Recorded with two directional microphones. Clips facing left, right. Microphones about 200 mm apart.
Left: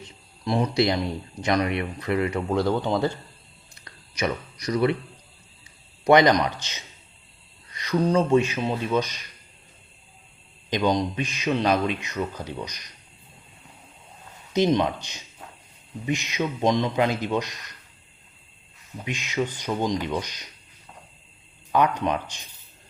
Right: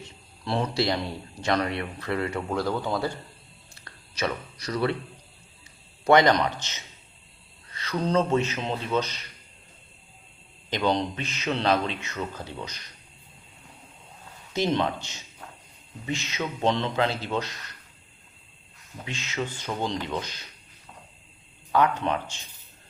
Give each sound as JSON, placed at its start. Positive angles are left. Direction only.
{"t": 0.0, "sound": "speech", "side_deg": 15}
{"t": 6.1, "sound": "speech", "side_deg": 15}
{"t": 7.7, "sound": "speech", "side_deg": 15}
{"t": 10.7, "sound": "speech", "side_deg": 15}
{"t": 14.5, "sound": "speech", "side_deg": 15}
{"t": 19.0, "sound": "speech", "side_deg": 15}
{"t": 21.7, "sound": "speech", "side_deg": 15}